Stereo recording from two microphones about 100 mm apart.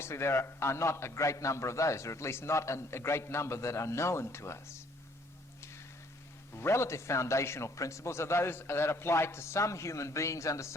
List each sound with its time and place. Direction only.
0.0 s a man's voice: 25° left (ahead or behind)
6.6 s a man's voice: 25° left (ahead or behind)